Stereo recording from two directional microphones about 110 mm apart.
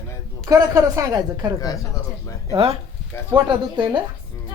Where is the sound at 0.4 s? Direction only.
30° right (ahead or behind).